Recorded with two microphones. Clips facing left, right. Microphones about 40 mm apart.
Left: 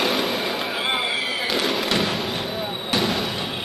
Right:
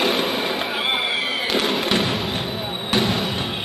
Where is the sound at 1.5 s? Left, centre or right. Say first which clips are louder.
Right 2 dB; centre.